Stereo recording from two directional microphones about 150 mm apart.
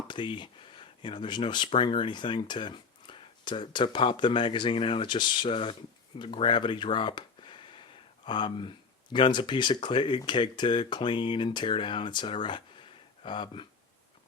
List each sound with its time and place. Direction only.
0.1 s speech: 30° left (ahead or behind)